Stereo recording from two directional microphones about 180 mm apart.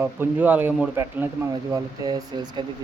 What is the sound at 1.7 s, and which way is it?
Speech, 25° right (ahead or behind).